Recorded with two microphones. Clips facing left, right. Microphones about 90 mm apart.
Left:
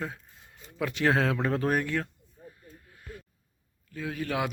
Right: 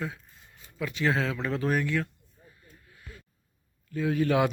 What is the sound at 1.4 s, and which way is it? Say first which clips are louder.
Speech: left 1 dB; 45° left (ahead or behind).